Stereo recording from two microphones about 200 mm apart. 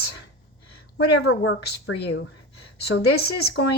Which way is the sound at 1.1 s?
55° left (ahead or behind).